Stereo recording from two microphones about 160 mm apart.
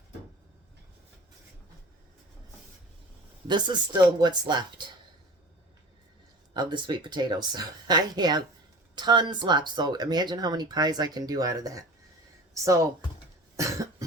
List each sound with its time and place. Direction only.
3.4 s speech: 30° right (ahead or behind)
6.5 s speech: 25° right (ahead or behind)
13.6 s cough: 20° right (ahead or behind)